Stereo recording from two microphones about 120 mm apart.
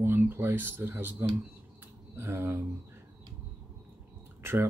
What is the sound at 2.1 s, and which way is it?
Speech, 20° right (ahead or behind).